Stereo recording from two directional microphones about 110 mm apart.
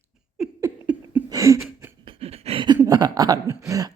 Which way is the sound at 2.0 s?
65° right (ahead or behind).